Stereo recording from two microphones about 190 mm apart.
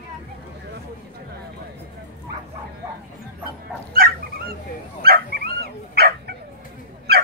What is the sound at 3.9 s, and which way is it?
Dog, 50° right (ahead or behind).